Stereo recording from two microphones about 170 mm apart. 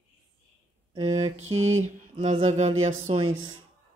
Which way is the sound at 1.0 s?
40° right (ahead or behind).